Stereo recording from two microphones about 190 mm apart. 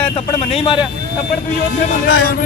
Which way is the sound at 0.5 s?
25° left (ahead or behind).